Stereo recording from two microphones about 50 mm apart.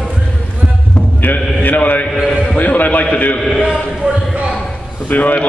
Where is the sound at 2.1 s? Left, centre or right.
Centre.